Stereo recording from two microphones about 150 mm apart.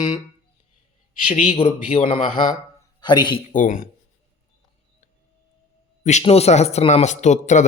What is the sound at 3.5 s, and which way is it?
Mantra, 60° left (ahead or behind).